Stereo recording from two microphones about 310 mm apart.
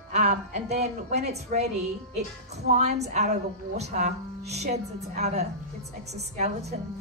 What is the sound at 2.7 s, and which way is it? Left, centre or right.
A woman's voice, right.